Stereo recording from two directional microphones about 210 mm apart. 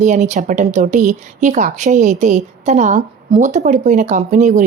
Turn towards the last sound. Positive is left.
turn(degrees=-35)  # may be behind; listen again after turning